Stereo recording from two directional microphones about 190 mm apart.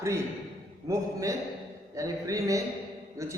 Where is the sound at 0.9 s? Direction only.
15° right (ahead or behind).